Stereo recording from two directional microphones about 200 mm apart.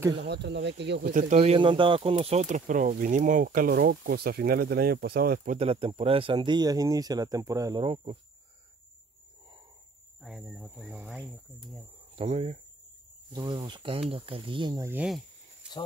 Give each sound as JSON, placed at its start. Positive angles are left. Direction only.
{"t": 0.2, "sound": "speech", "side_deg": -60}
{"t": 1.1, "sound": "speech", "side_deg": -35}
{"t": 5.6, "sound": "speech", "side_deg": -30}
{"t": 10.2, "sound": "speech", "side_deg": 0}
{"t": 12.2, "sound": "speech", "side_deg": -35}
{"t": 13.3, "sound": "speech", "side_deg": -20}
{"t": 14.9, "sound": "speech", "side_deg": -5}